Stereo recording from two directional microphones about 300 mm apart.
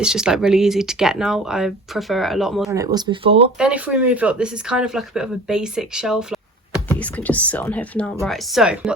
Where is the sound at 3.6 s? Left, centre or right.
Centre.